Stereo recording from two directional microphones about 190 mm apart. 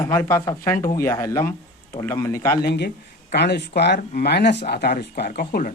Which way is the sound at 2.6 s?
60° left (ahead or behind).